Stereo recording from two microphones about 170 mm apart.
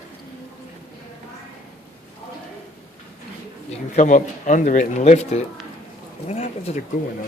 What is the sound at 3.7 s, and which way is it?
Speech, 45° left (ahead or behind).